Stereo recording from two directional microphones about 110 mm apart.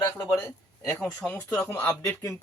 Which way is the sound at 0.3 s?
25° left (ahead or behind).